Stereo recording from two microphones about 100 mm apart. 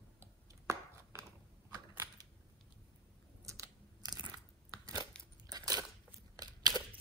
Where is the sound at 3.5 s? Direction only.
35° right (ahead or behind).